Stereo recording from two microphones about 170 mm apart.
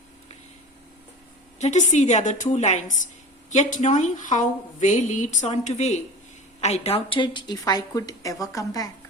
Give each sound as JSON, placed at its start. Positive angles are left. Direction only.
{"t": 1.5, "sound": "a woman's voice", "side_deg": 45}